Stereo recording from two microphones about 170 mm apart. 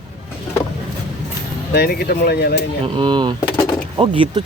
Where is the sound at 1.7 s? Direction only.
70° left (ahead or behind).